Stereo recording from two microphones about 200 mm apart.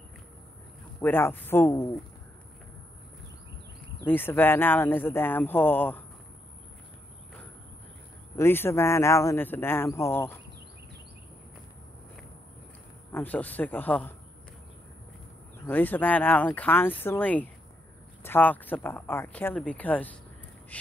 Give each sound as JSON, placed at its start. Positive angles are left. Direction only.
{"t": 1.0, "sound": "speech", "side_deg": 10}
{"t": 4.0, "sound": "speech", "side_deg": 10}
{"t": 8.4, "sound": "speech", "side_deg": 10}
{"t": 13.1, "sound": "speech", "side_deg": 10}
{"t": 15.6, "sound": "speech", "side_deg": 10}